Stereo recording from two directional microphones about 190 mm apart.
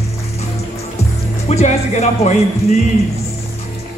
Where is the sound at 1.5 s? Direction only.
35° left (ahead or behind).